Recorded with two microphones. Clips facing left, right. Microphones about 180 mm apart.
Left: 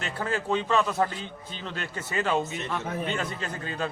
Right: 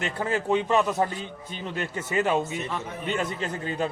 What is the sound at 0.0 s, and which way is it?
A man's voice, 20° right (ahead or behind).